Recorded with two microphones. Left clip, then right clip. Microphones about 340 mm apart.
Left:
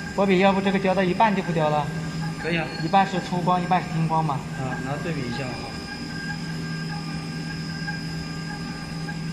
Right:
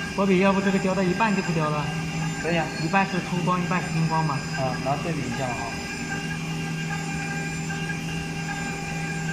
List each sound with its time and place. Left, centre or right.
0.2 s a man's voice: centre
2.9 s a man's voice: centre